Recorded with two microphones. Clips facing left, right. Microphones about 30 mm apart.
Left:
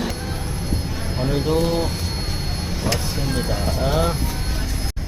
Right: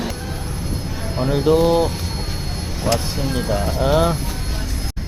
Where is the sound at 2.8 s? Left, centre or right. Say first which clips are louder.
Right 4 dB; centre.